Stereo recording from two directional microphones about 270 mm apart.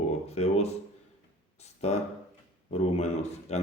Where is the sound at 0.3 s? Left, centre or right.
Left.